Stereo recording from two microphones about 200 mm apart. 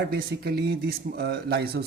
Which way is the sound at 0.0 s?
50° right (ahead or behind).